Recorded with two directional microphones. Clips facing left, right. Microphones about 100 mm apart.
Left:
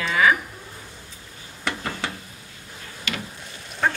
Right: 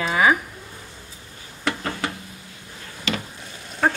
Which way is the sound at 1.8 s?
Centre (ahead or behind).